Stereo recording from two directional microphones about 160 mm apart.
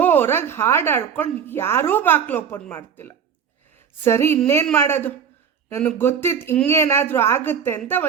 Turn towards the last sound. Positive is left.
turn(degrees=15)  # may be behind; listen again after turning